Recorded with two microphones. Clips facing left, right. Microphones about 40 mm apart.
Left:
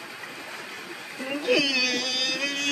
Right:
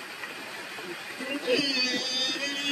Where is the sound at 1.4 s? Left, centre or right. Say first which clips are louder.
Left 4 dB; left.